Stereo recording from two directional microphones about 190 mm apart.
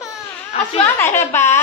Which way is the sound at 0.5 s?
35° left (ahead or behind).